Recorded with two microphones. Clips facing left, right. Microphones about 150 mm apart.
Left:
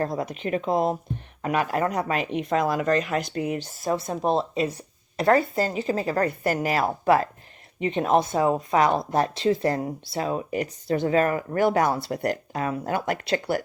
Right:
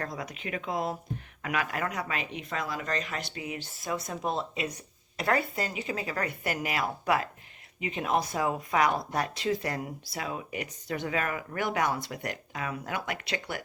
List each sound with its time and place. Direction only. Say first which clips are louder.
0.1 s speech: left 9 dB; 50° left (ahead or behind)
0.5 s speech: left 9 dB; 35° left (ahead or behind)